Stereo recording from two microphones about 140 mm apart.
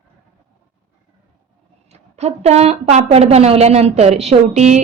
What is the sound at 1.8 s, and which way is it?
A woman's voice, 50° right (ahead or behind).